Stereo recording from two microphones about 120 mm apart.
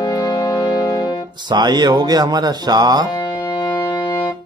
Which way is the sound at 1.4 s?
40° right (ahead or behind).